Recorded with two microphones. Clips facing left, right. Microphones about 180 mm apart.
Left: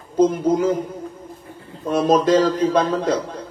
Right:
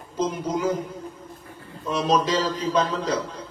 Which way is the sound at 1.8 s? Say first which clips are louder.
Left 6 dB; 50° left (ahead or behind).